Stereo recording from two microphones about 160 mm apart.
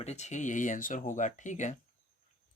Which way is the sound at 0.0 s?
45° left (ahead or behind).